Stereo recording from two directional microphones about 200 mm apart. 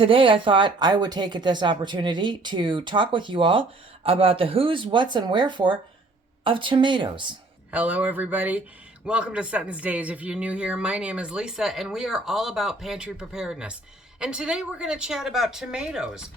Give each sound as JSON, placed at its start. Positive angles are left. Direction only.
{"t": 0.0, "sound": "speech", "side_deg": -25}
{"t": 7.7, "sound": "speech", "side_deg": -10}